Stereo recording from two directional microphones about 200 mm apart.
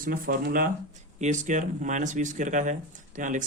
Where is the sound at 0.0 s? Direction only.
45° right (ahead or behind).